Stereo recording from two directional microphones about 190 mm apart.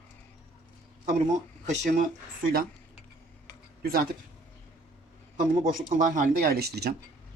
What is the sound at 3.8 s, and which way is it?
Speech, 50° right (ahead or behind).